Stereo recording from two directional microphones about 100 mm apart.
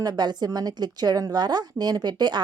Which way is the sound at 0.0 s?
45° right (ahead or behind).